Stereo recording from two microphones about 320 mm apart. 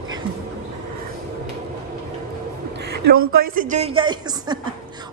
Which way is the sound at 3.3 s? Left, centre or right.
Right.